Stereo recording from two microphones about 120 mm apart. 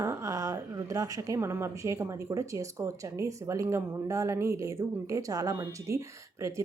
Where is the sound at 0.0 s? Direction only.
25° right (ahead or behind).